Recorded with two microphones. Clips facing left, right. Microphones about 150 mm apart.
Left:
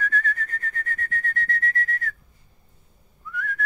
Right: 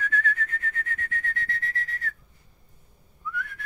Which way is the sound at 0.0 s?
40° left (ahead or behind).